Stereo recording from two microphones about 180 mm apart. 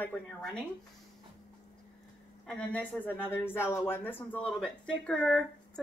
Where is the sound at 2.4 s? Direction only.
5° left (ahead or behind).